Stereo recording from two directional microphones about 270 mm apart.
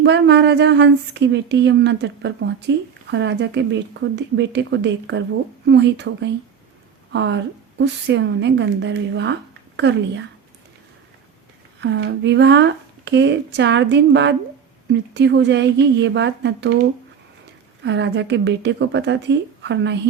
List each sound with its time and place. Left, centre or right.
0.0 s speech: right
11.8 s speech: right
17.8 s speech: right